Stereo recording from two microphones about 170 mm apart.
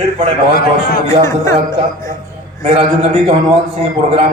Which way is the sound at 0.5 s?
60° left (ahead or behind).